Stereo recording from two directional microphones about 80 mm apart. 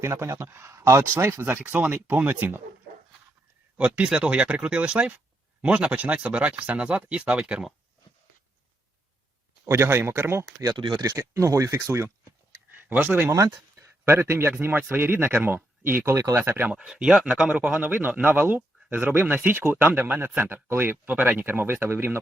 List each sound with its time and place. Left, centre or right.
0.0 s speech: right
3.8 s speech: centre
9.6 s speech: right
10.8 s speech: right
11.2 s speech: right
12.7 s speech: right
13.3 s speech: right
16.0 s speech: right
16.6 s speech: centre
17.7 s speech: right